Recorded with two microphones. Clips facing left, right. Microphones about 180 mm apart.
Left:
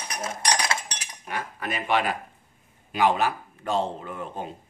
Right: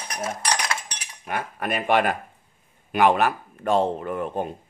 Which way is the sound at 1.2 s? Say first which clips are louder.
Right 4 dB; 55° right (ahead or behind).